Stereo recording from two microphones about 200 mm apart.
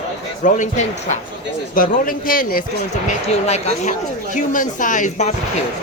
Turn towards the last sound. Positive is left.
turn(degrees=35)  # may be behind; listen again after turning